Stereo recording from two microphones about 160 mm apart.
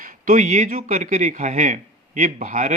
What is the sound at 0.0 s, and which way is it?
Speech, 55° right (ahead or behind).